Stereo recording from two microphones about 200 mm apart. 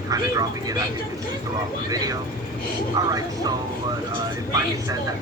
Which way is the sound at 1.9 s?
20° right (ahead or behind).